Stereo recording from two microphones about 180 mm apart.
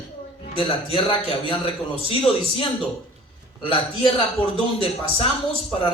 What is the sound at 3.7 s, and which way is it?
Speech, 30° left (ahead or behind).